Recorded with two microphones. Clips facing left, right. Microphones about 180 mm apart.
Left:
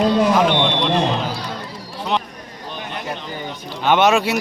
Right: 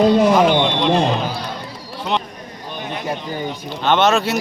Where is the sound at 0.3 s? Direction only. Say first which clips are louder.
Right 2 dB; 5° right (ahead or behind).